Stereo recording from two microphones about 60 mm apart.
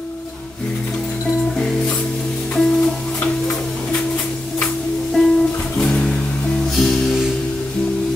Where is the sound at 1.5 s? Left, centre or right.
Centre.